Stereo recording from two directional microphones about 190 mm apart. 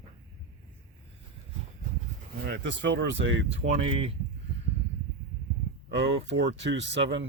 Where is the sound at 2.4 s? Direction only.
60° right (ahead or behind).